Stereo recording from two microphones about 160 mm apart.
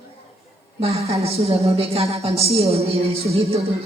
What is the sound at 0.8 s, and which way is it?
Speech, 40° right (ahead or behind).